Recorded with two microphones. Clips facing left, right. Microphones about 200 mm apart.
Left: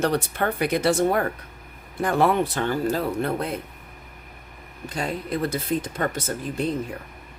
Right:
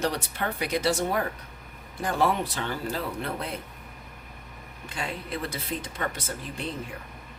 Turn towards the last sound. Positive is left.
turn(degrees=45)  # may be behind; listen again after turning